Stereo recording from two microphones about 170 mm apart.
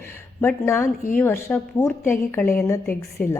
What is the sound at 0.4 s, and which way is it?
A man's voice, 15° left (ahead or behind).